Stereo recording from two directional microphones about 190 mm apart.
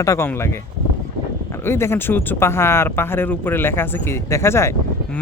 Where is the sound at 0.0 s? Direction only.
15° left (ahead or behind).